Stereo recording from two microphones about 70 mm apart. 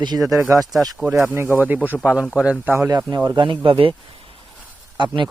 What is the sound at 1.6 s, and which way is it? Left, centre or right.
Speech, right.